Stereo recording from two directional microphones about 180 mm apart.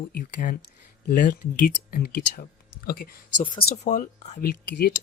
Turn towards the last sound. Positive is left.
turn(degrees=60)  # may be behind; listen again after turning